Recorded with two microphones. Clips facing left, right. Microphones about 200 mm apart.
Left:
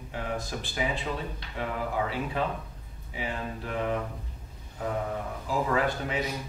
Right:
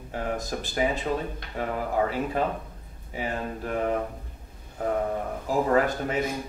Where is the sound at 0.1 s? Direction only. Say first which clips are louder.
Right 4 dB; 45° right (ahead or behind).